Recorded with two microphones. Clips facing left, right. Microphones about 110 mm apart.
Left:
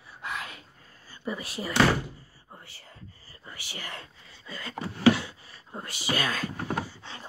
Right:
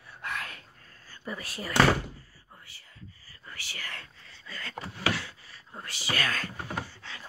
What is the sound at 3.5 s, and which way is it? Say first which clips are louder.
Speech: left 2 dB; 20° left (ahead or behind).